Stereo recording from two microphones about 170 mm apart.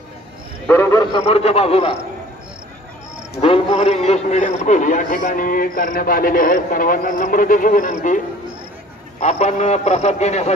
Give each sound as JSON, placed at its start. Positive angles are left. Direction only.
{"t": 0.7, "sound": "cricket", "side_deg": 15}
{"t": 1.2, "sound": "a man's voice", "side_deg": 35}
{"t": 3.3, "sound": "a man's voice", "side_deg": 35}
{"t": 9.2, "sound": "a man's voice", "side_deg": 40}